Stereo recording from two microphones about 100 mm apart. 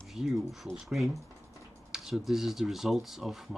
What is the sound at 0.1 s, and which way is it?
Speech, centre (ahead or behind).